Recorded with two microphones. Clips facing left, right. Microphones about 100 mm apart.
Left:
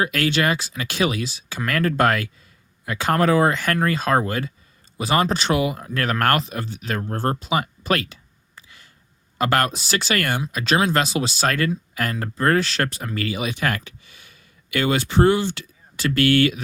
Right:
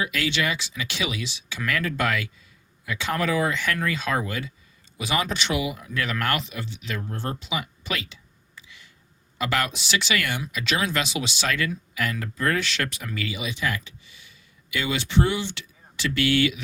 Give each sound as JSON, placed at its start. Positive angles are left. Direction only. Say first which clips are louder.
{"t": 0.0, "sound": "speech", "louder": "left 5 dB", "side_deg": 50}